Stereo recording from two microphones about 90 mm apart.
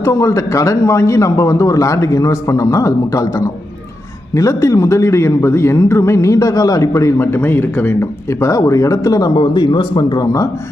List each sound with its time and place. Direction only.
0.0 s a man's voice: 35° left (ahead or behind)
9.3 s speech: 55° left (ahead or behind)